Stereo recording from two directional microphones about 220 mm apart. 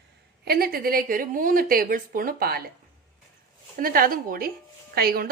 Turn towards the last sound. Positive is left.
turn(degrees=-45)  # may be behind; listen again after turning